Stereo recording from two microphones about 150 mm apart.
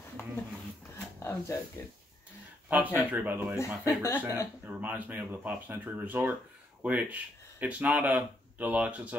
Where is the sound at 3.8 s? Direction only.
15° left (ahead or behind).